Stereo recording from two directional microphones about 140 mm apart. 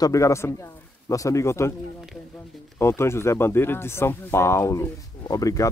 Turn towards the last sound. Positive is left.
turn(degrees=25)  # may be behind; listen again after turning